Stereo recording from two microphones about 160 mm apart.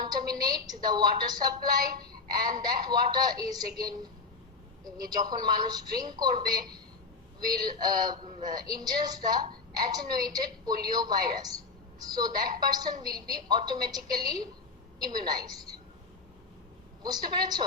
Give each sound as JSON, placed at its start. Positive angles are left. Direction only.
{"t": 0.0, "sound": "a woman's voice", "side_deg": -25}
{"t": 17.0, "sound": "a woman's voice", "side_deg": -25}